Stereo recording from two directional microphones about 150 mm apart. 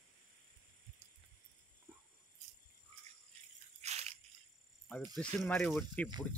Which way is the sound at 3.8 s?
45° right (ahead or behind).